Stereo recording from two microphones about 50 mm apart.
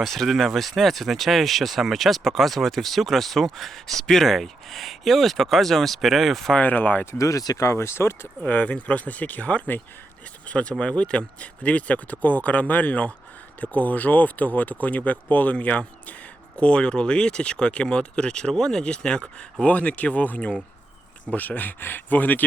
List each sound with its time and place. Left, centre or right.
0.3 s speech: centre
6.6 s speech: left
7.2 s speech: left
8.4 s speech: left